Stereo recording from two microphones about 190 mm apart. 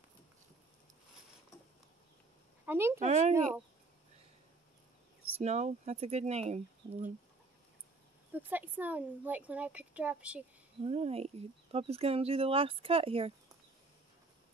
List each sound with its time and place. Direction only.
2.6 s a sound: 10° right (ahead or behind)
3.0 s speech: 35° right (ahead or behind)
5.4 s speech: 35° right (ahead or behind)
8.3 s speech: 10° right (ahead or behind)
10.8 s speech: 30° right (ahead or behind)